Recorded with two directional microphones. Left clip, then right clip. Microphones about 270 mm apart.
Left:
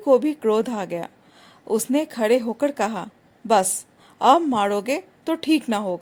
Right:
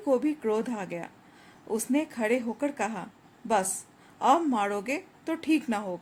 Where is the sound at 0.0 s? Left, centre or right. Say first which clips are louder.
Left 9 dB; left.